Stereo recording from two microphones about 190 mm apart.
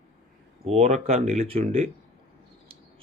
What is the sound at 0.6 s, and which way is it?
A man's voice, 35° right (ahead or behind).